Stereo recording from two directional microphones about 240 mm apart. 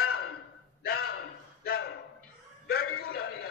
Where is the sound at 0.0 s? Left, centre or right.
Left.